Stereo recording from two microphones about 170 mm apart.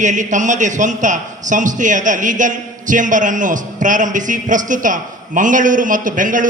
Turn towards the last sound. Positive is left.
turn(degrees=-50)  # may be behind; listen again after turning